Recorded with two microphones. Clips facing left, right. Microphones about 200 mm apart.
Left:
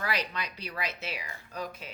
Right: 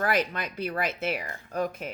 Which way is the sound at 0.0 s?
50° right (ahead or behind).